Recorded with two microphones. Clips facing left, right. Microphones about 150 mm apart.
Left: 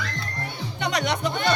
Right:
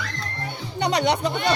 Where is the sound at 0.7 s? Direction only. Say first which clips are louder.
Right 5 dB; 35° right (ahead or behind).